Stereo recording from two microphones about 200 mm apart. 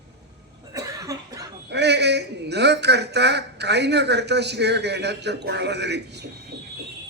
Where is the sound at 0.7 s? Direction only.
15° right (ahead or behind).